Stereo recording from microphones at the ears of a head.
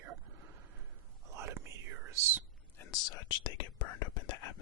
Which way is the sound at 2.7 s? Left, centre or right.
Left.